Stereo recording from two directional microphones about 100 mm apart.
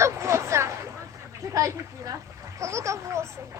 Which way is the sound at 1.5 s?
35° right (ahead or behind).